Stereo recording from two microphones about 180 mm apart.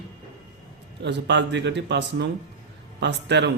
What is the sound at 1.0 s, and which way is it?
Speech, 75° right (ahead or behind).